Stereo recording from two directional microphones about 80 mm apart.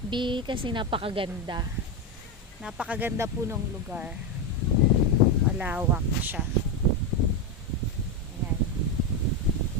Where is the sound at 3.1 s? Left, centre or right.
Right.